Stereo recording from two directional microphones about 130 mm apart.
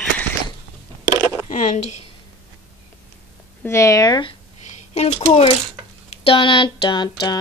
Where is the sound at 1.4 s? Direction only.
60° left (ahead or behind).